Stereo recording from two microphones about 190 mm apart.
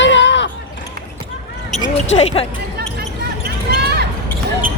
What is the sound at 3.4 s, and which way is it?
Basketball bounce, 60° right (ahead or behind).